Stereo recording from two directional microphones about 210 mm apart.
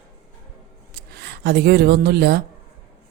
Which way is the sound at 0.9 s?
50° right (ahead or behind).